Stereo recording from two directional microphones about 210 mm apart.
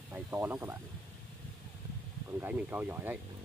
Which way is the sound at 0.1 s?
10° right (ahead or behind).